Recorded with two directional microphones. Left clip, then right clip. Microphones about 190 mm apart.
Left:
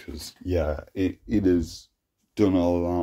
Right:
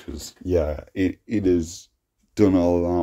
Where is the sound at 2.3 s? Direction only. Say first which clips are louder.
Right 4 dB; 25° right (ahead or behind).